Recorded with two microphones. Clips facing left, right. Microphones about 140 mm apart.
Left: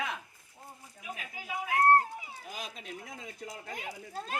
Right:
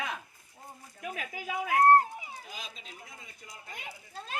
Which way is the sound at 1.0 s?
90° right.